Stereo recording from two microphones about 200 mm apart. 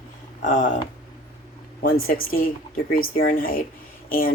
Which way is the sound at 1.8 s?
45° left (ahead or behind).